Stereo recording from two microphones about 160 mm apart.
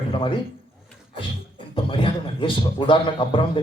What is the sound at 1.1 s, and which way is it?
A man's voice, 35° left (ahead or behind).